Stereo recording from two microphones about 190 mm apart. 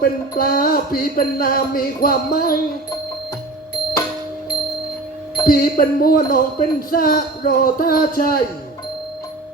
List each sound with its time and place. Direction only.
0.0 s speech: 50° left (ahead or behind)
5.5 s speech: 50° left (ahead or behind)